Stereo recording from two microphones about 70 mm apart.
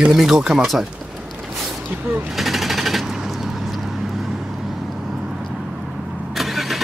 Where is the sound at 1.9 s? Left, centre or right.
Right.